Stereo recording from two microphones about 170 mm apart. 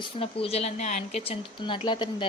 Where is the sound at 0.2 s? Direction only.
35° left (ahead or behind).